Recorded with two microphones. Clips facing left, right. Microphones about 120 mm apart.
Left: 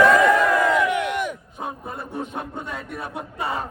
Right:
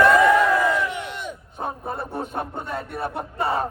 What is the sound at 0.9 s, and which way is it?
Crowd, 60° left (ahead or behind).